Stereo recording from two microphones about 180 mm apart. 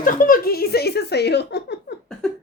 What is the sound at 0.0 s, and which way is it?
Speech, 50° left (ahead or behind).